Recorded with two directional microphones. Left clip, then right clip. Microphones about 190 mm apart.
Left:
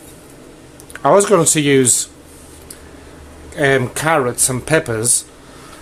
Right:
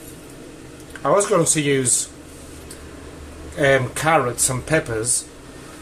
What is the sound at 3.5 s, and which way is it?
Speech, 50° left (ahead or behind).